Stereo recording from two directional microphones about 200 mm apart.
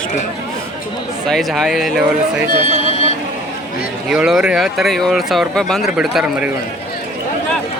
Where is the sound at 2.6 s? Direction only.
30° left (ahead or behind).